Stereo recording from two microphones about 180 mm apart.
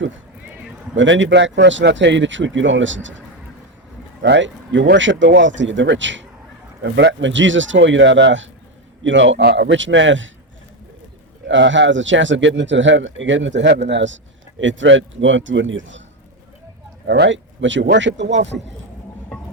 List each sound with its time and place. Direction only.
0.9 s speech: 90° right
6.8 s speech: 75° right (ahead or behind)
11.4 s speech: 90° right
17.1 s speech: 85° right